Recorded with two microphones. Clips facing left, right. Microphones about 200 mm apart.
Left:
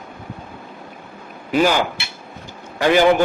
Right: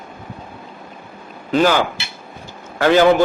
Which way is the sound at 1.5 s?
10° left (ahead or behind).